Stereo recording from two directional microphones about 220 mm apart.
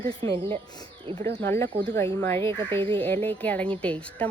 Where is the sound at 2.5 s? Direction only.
20° right (ahead or behind).